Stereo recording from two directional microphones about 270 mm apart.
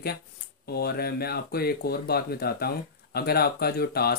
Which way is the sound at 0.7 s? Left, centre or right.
Left.